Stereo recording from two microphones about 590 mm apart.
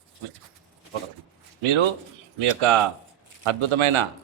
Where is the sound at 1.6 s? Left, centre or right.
Right.